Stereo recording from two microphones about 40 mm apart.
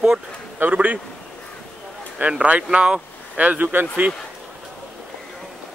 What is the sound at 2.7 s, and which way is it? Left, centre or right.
Speech, right.